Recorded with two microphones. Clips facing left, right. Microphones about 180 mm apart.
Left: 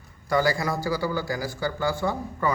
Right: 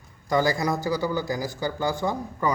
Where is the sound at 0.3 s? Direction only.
20° right (ahead or behind).